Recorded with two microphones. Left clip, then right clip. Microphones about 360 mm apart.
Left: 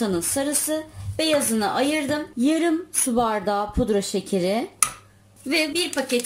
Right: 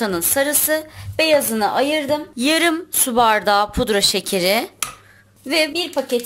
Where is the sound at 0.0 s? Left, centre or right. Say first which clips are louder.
Right 5 dB; right.